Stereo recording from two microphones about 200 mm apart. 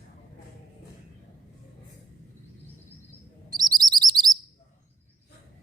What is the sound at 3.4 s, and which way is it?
Chirp, 20° right (ahead or behind).